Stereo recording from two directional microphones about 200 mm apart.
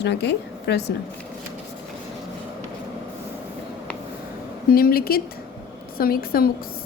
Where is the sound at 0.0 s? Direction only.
60° left (ahead or behind).